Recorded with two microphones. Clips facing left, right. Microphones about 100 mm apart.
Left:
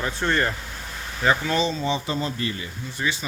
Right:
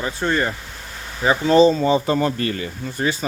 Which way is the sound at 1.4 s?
35° right (ahead or behind).